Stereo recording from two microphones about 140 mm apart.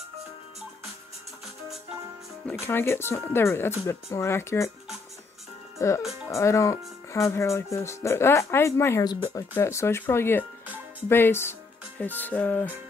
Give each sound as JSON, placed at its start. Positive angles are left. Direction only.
{"t": 2.6, "sound": "speech", "side_deg": 15}
{"t": 5.8, "sound": "speech", "side_deg": 20}
{"t": 9.0, "sound": "speech", "side_deg": 30}
{"t": 9.6, "sound": "speech", "side_deg": 20}